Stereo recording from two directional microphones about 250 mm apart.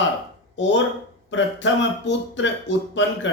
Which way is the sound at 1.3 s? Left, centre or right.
Left.